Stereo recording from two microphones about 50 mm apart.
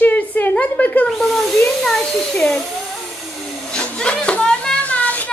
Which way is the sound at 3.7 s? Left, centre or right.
Left.